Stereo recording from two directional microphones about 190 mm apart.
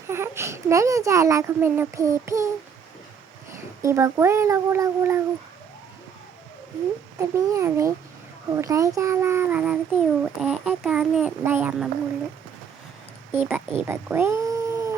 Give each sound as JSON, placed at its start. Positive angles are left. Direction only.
{"t": 0.1, "sound": "a child's voice", "side_deg": -15}
{"t": 3.8, "sound": "a child's voice", "side_deg": -15}
{"t": 7.2, "sound": "a child's voice", "side_deg": -15}
{"t": 13.3, "sound": "speech", "side_deg": -5}